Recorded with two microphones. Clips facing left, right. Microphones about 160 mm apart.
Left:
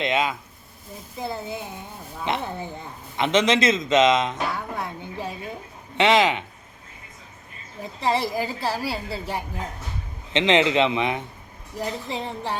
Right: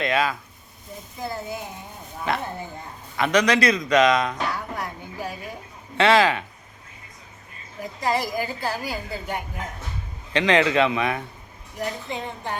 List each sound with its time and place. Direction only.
0.0 s a woman's voice: 20° left (ahead or behind)
4.5 s a sound: 25° left (ahead or behind)
6.0 s a woman's voice: 20° left (ahead or behind)
7.8 s a woman's voice: 25° left (ahead or behind)
12.0 s speech: 30° left (ahead or behind)